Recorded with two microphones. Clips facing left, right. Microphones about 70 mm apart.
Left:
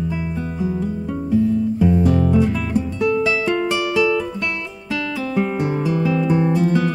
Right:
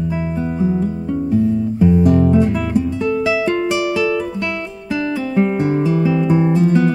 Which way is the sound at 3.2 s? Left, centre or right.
Centre.